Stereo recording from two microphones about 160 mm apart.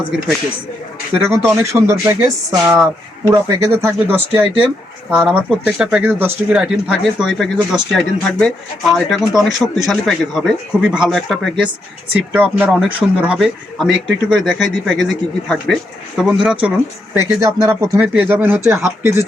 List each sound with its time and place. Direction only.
1.3 s speech: 15° right (ahead or behind); by 11.7 s centre (ahead or behind)
12.3 s speech: 10° right (ahead or behind)
17.4 s speech: 20° right (ahead or behind)
18.0 s speech: 10° right (ahead or behind)